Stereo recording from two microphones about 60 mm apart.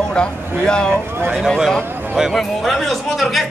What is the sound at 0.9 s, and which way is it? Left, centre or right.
Speech, right.